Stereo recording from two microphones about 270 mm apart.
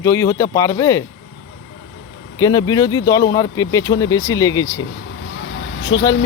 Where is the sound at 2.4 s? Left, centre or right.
Centre.